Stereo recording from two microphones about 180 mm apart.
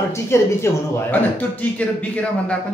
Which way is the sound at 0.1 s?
15° left (ahead or behind).